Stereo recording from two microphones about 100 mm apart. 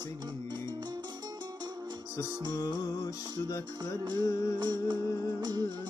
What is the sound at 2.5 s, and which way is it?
Music, 35° left (ahead or behind).